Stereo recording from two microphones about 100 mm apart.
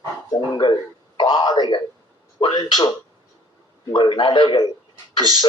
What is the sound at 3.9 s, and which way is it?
Speech, 55° left (ahead or behind).